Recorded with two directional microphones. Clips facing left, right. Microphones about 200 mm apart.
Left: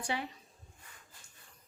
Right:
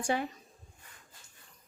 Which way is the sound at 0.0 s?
50° right (ahead or behind).